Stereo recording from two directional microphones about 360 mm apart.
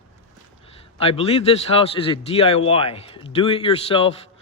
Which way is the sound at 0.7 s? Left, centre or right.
Centre.